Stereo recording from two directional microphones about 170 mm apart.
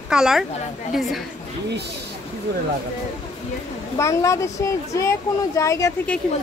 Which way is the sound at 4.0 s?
15° left (ahead or behind).